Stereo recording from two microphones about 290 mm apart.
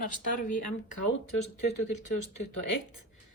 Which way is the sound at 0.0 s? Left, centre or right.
Left.